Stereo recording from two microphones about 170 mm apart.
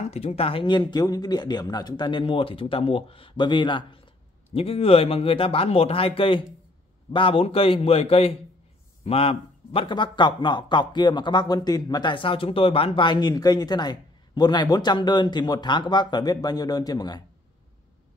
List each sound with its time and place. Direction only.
0.0 s a man's voice: 40° left (ahead or behind); by 17.2 s 25° left (ahead or behind)